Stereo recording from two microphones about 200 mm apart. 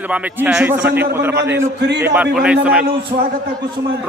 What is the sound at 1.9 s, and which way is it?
Speech, 55° right (ahead or behind).